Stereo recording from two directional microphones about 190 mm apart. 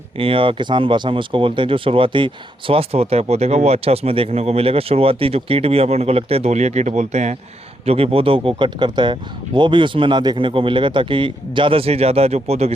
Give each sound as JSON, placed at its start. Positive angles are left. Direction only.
{"t": 0.2, "sound": "a man's voice", "side_deg": -30}